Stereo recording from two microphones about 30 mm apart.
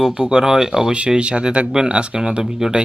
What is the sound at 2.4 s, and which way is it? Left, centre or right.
Speech, centre.